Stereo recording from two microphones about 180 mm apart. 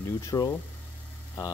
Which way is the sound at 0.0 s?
20° left (ahead or behind).